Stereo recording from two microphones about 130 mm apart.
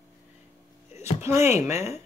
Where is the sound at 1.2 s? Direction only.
20° right (ahead or behind).